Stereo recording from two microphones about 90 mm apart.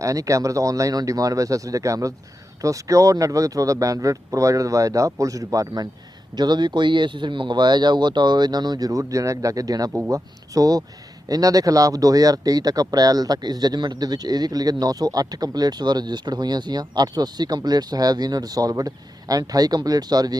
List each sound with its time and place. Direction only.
0.0 s speech: 40° right (ahead or behind)